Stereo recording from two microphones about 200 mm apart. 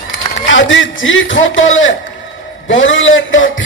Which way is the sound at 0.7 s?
75° left (ahead or behind).